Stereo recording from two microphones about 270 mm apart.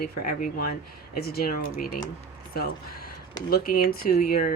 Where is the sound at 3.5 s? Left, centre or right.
Left.